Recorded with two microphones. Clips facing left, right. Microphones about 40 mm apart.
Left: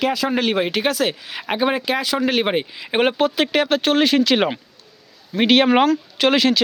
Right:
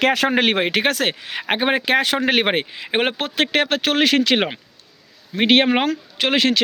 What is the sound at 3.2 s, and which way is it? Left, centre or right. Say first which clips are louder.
Speech: left 2 dB; right.